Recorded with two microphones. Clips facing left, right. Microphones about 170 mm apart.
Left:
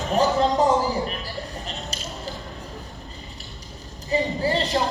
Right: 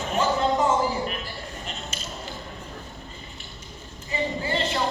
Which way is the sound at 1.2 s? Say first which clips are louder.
Left 3 dB; 35° left (ahead or behind).